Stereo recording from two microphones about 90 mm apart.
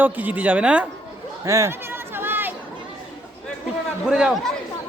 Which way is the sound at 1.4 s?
35° right (ahead or behind).